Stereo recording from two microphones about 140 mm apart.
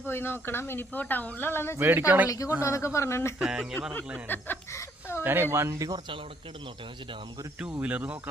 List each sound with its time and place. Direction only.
0.0 s speech: 15° left (ahead or behind)
1.8 s speech: 15° right (ahead or behind)
2.3 s a man's voice: 20° left (ahead or behind)
3.3 s speech: 5° right (ahead or behind)
4.3 s a sound: 15° left (ahead or behind)
5.2 s speech: 15° right (ahead or behind)
7.8 s speech: 10° right (ahead or behind)